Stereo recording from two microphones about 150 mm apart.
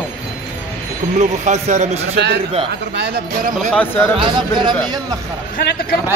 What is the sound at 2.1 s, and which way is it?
Speech, 90° right.